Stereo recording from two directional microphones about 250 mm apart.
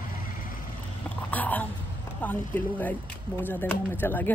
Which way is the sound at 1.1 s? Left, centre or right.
Centre.